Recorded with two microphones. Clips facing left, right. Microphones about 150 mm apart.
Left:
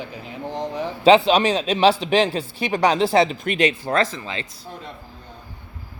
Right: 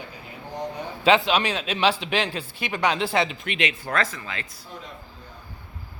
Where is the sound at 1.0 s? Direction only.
35° left (ahead or behind).